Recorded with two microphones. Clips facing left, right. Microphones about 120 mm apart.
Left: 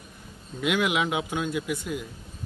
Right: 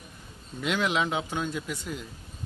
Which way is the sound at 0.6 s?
10° left (ahead or behind).